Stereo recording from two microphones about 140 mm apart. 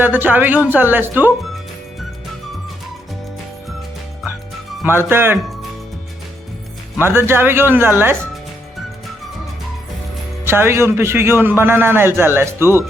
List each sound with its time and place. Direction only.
0.0 s a man's voice: 15° right (ahead or behind)
4.9 s a man's voice: 15° right (ahead or behind)
7.0 s a man's voice: 15° right (ahead or behind)
10.4 s a man's voice: 15° right (ahead or behind)